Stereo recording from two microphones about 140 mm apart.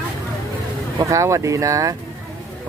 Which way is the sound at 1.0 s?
20° right (ahead or behind).